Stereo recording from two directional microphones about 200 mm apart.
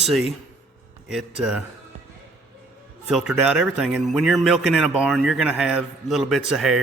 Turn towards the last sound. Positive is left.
turn(degrees=0)  # may be behind; listen again after turning